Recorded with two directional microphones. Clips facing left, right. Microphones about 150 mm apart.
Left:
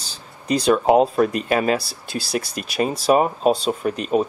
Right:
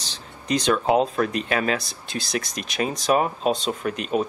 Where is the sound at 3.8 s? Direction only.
35° left (ahead or behind).